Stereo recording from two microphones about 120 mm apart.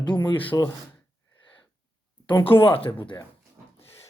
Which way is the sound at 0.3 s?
45° left (ahead or behind).